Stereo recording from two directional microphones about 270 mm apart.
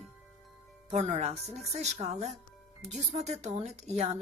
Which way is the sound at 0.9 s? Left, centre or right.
Right.